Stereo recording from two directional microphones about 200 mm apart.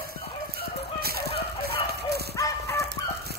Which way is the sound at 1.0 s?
50° right (ahead or behind).